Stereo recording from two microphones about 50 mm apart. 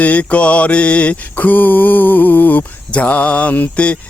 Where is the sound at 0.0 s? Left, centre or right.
Left.